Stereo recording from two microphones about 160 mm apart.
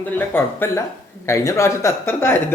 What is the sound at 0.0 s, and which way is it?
A man's voice, 10° left (ahead or behind).